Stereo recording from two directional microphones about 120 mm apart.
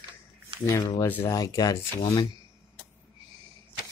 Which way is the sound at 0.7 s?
25° left (ahead or behind).